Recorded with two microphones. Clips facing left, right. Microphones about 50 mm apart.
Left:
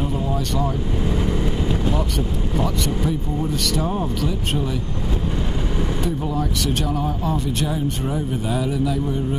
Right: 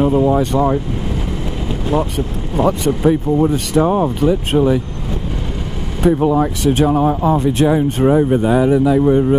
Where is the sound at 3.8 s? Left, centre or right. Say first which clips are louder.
Right 9 dB; right.